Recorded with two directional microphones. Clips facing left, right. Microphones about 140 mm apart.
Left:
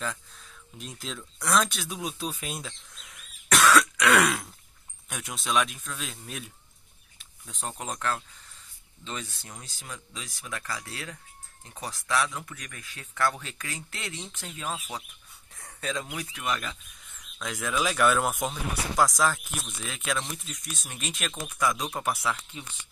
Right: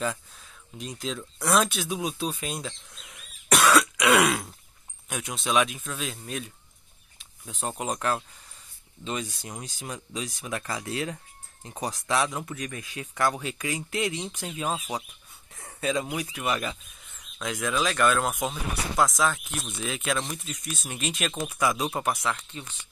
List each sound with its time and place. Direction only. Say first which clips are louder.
0.7 s speech: right 5 dB; centre (ahead or behind)
7.4 s speech: right 5 dB; 10° right (ahead or behind)
22.1 s speech: right 1 dB; 5° left (ahead or behind)